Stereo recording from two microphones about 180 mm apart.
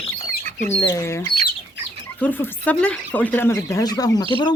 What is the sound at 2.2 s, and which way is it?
Speech, 10° left (ahead or behind).